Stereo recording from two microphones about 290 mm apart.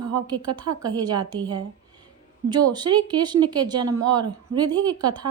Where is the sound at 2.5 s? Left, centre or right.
Centre.